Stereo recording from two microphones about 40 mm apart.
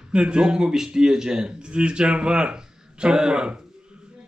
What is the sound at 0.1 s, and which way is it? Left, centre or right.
Speech, right.